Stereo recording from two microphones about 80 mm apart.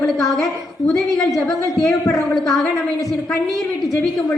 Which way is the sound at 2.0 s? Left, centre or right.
Left.